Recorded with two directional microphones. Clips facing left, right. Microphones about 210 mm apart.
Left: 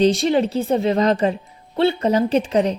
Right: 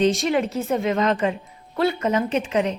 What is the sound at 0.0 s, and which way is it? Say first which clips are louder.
Speech: left 3 dB; 35° left (ahead or behind).